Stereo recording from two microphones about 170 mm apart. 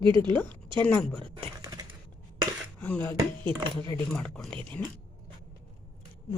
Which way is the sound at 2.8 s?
10° left (ahead or behind).